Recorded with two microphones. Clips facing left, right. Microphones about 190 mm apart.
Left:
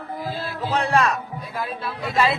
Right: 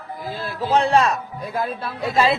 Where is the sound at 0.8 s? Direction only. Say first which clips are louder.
Right 3 dB; 25° right (ahead or behind).